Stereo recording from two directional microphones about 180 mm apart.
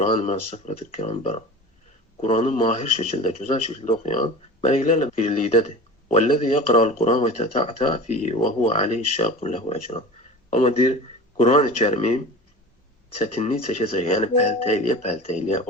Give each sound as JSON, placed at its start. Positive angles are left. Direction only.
{"t": 0.0, "sound": "speech", "side_deg": 40}
{"t": 13.2, "sound": "speech", "side_deg": 40}